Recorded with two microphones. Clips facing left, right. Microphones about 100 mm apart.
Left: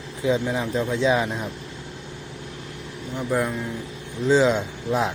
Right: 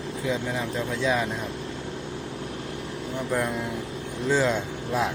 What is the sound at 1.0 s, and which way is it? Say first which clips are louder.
Speech: left 4 dB; 20° left (ahead or behind).